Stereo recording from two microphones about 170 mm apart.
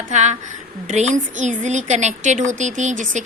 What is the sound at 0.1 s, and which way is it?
A woman's voice, 45° right (ahead or behind).